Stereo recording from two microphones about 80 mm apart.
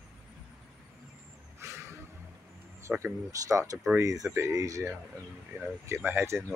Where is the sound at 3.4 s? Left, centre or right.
Right.